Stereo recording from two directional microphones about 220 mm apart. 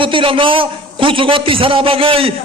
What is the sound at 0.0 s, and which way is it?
A man's voice, 25° right (ahead or behind).